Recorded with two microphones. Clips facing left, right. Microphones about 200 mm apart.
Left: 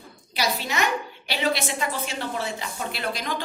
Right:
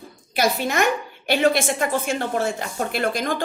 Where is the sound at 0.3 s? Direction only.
50° right (ahead or behind).